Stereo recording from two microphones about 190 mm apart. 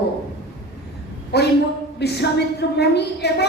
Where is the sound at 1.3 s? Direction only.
60° left (ahead or behind).